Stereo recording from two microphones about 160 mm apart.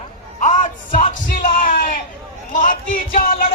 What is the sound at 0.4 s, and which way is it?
Music, 50° left (ahead or behind).